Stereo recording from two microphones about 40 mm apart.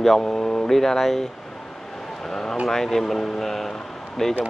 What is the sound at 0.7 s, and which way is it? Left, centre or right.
Speech, centre.